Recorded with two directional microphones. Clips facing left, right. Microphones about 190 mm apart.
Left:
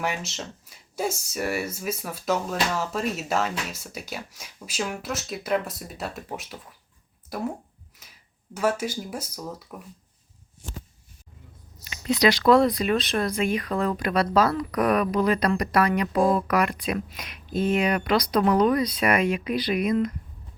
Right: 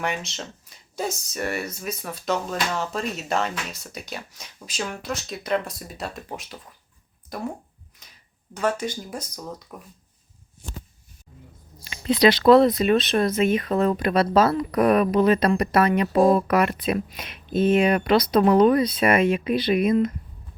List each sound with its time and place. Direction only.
0.0 s speech: 5° left (ahead or behind)
8.0 s a sound: 5° left (ahead or behind)
8.5 s speech: 5° left (ahead or behind)
12.0 s speech: 25° right (ahead or behind)